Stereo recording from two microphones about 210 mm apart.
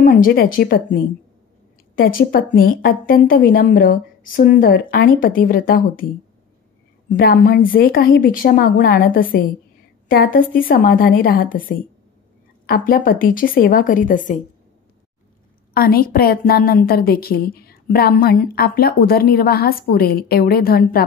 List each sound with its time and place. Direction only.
0.0 s a woman's voice: 40° left (ahead or behind)
7.1 s a woman's voice: 45° left (ahead or behind)
15.7 s a woman's voice: 45° left (ahead or behind)